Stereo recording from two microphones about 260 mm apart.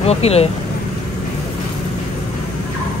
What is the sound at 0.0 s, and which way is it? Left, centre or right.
Speech, left.